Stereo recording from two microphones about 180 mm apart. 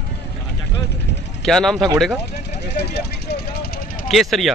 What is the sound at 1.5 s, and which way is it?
Speech, centre (ahead or behind).